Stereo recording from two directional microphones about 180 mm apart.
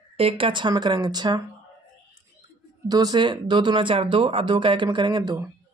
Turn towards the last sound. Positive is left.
turn(degrees=-25)  # may be behind; listen again after turning